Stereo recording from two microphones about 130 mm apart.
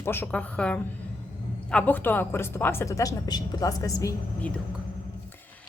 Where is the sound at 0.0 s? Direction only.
15° left (ahead or behind).